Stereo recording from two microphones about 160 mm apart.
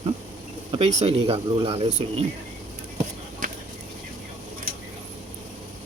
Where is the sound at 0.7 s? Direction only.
40° right (ahead or behind).